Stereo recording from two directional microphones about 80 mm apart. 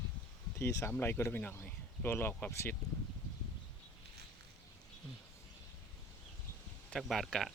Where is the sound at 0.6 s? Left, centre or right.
Left.